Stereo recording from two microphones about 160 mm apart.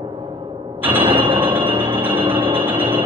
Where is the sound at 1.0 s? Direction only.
30° right (ahead or behind).